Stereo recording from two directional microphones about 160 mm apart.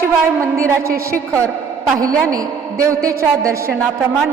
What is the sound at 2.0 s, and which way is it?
A man's voice, 20° right (ahead or behind).